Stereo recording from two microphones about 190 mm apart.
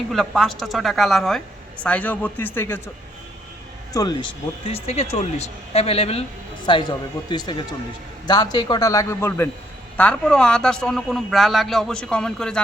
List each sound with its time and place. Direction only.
0.1 s a man's voice: centre (ahead or behind)
3.9 s a man's voice: 20° left (ahead or behind); by 12.6 s 5° left (ahead or behind)